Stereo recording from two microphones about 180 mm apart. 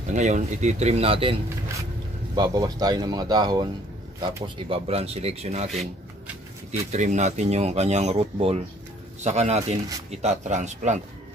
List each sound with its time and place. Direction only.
0.1 s speech: 40° right (ahead or behind)
2.3 s speech: 20° right (ahead or behind)
5.7 s rub: centre (ahead or behind)
6.9 s speech: 40° right (ahead or behind)